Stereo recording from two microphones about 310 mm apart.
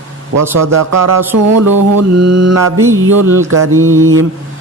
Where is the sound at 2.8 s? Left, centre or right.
Centre.